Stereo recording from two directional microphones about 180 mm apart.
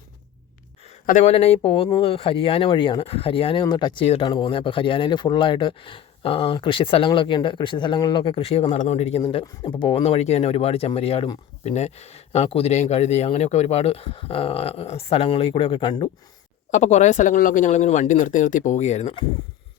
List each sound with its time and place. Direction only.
1.0 s speech: 40° left (ahead or behind)
16.7 s speech: 40° left (ahead or behind)